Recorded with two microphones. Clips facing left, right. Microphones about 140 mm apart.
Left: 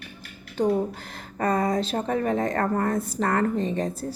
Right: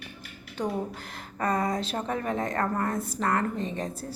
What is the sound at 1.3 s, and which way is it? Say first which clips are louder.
A woman's voice: left 4 dB; 35° left (ahead or behind).